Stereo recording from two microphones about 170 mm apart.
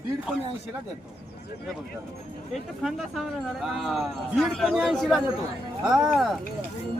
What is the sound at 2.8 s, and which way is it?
Speech, centre (ahead or behind).